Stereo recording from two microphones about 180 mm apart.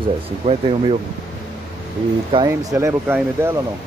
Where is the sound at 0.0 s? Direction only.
30° right (ahead or behind).